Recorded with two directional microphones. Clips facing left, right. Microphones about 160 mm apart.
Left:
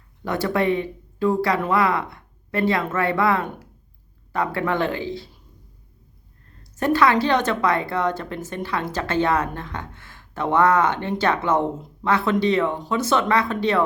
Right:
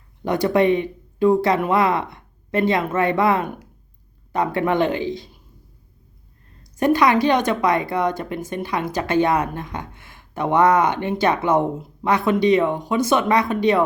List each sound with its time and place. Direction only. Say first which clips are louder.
0.3 s speech: right 4 dB; 20° right (ahead or behind)
6.6 s speech: right 2 dB; 15° right (ahead or behind)